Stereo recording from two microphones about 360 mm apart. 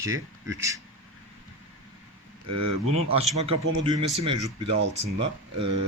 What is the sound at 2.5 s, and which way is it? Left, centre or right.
Speech, right.